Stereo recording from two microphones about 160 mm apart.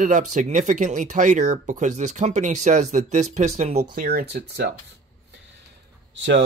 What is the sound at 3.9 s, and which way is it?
Speech, 70° right (ahead or behind).